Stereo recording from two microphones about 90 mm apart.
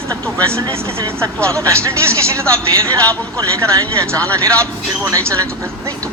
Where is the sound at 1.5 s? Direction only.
35° right (ahead or behind).